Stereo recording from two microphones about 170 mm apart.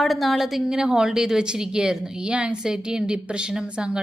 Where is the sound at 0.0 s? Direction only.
Centre (ahead or behind).